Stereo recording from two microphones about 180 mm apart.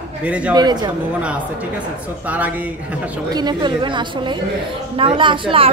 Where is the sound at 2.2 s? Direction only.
10° right (ahead or behind).